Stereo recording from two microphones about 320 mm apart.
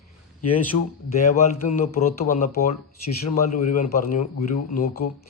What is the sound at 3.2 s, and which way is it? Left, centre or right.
A man's voice, left.